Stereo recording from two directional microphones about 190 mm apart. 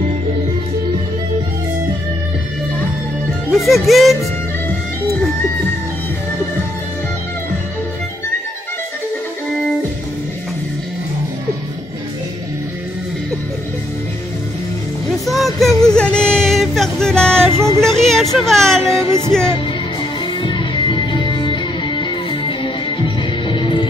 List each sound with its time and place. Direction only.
3.4 s speech: centre (ahead or behind)
15.2 s a sound: centre (ahead or behind)
17.7 s speech: centre (ahead or behind)
18.9 s music: 15° right (ahead or behind)
20.4 s music: 25° left (ahead or behind)